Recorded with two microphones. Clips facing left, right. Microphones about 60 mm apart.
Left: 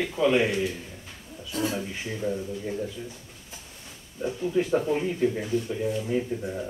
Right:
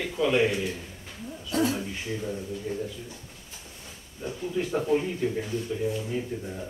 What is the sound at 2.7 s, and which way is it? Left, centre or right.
Speech, left.